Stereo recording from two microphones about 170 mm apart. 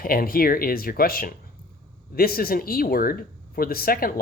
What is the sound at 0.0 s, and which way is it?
Speech, 60° left (ahead or behind).